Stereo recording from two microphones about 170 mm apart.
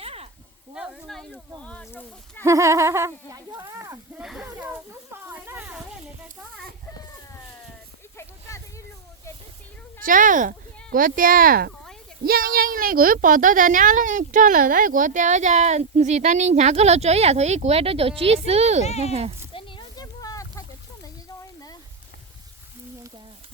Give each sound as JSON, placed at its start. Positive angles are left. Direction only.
{"t": 0.0, "sound": "snake", "side_deg": -35}
{"t": 0.7, "sound": "speech", "side_deg": -5}
{"t": 2.4, "sound": "speech", "side_deg": -20}
{"t": 4.2, "sound": "snake", "side_deg": -5}
{"t": 8.2, "sound": "a sound", "side_deg": 15}
{"t": 10.0, "sound": "a woman's voice", "side_deg": -50}
{"t": 18.9, "sound": "speech", "side_deg": 40}
{"t": 19.5, "sound": "a sound", "side_deg": 30}